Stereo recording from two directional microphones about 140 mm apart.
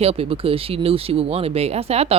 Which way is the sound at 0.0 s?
45° right (ahead or behind).